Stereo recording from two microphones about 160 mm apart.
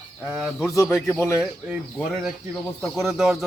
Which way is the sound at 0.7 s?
20° left (ahead or behind).